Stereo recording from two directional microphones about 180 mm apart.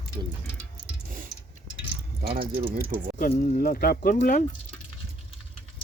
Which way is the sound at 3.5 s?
50° left (ahead or behind).